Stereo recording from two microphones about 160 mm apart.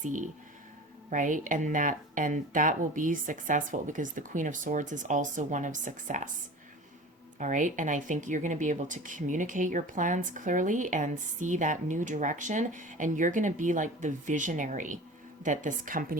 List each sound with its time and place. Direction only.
0.0 s speech: 50° right (ahead or behind)
7.3 s speech: 50° right (ahead or behind)